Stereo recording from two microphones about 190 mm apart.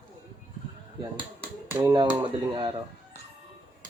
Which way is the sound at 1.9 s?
25° right (ahead or behind).